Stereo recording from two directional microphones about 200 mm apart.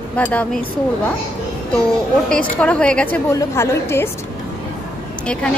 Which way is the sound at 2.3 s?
5° left (ahead or behind).